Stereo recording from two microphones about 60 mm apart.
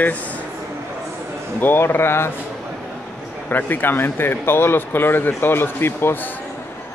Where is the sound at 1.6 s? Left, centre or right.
Left.